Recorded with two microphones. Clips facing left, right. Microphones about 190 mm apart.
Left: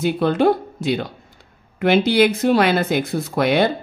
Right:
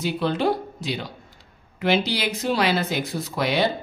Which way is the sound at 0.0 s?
50° left (ahead or behind).